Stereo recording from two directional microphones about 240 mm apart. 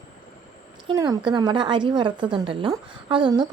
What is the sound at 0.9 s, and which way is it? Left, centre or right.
A woman's voice, centre.